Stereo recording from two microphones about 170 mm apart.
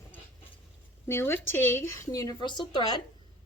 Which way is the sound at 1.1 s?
15° left (ahead or behind).